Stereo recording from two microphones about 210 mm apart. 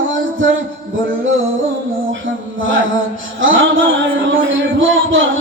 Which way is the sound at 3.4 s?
65° right (ahead or behind).